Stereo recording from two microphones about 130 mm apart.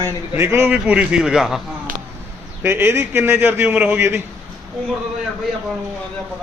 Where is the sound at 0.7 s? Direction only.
10° right (ahead or behind).